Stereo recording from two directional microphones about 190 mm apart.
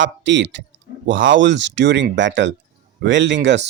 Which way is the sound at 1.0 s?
80° right.